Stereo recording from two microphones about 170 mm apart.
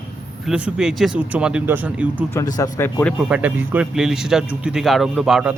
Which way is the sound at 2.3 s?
20° left (ahead or behind).